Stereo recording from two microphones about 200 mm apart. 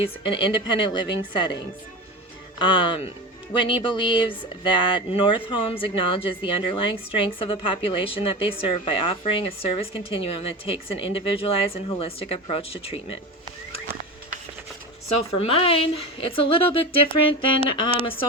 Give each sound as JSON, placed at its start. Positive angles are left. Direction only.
{"t": 0.3, "sound": "a woman's voice", "side_deg": 25}
{"t": 15.1, "sound": "a woman's voice", "side_deg": 30}